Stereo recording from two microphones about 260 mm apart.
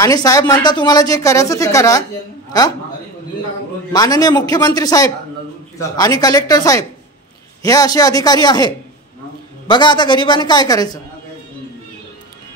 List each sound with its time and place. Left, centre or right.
0.0 s speech: centre
3.9 s speech: centre